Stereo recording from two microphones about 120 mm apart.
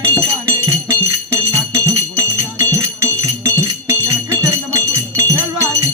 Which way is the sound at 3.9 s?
25° right (ahead or behind).